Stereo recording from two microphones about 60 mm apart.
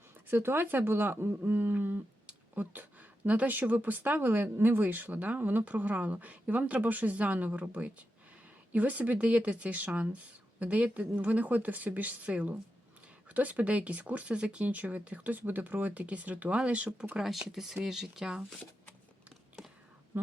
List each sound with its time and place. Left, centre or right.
0.3 s speech: right
17.2 s speech: centre